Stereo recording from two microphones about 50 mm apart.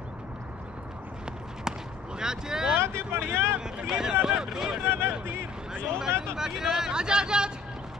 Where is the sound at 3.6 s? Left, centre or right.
Centre.